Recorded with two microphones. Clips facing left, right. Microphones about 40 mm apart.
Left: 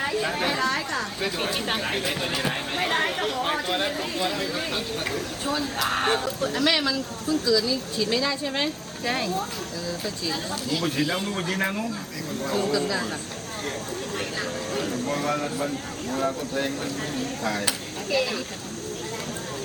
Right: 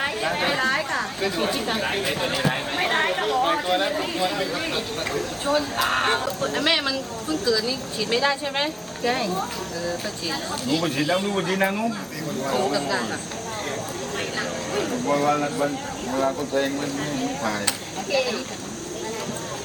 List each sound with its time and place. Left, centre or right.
1.8 s speech: centre
5.5 s speech: right
6.4 s speech: right
9.0 s speech: centre
10.8 s speech: centre
14.3 s speech: centre